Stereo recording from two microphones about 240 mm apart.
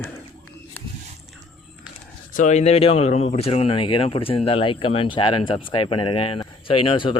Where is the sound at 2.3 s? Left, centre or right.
Left.